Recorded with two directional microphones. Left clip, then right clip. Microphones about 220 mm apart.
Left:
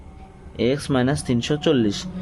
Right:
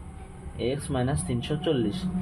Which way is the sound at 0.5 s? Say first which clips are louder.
Left 8 dB; 50° left (ahead or behind).